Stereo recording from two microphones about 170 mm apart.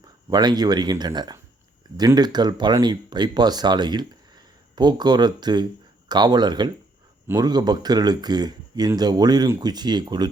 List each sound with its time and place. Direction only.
0.3 s speech: 25° right (ahead or behind)